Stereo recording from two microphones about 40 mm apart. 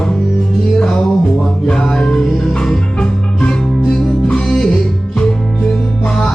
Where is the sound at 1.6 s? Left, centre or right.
Centre.